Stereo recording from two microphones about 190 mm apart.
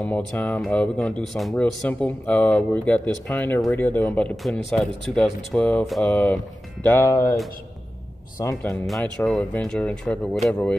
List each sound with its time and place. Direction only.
0.0 s speech: 10° left (ahead or behind)
8.4 s speech: 15° left (ahead or behind)
8.8 s speech: centre (ahead or behind)